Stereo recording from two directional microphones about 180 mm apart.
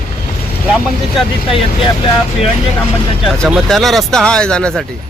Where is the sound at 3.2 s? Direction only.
Centre (ahead or behind).